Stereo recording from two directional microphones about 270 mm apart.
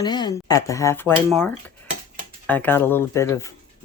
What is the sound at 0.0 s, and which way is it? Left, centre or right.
Speech, centre.